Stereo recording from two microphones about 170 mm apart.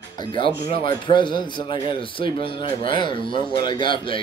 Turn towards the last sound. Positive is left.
turn(degrees=30)  # may be behind; listen again after turning